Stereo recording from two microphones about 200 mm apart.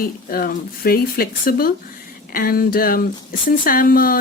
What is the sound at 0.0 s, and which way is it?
Speech, 45° left (ahead or behind).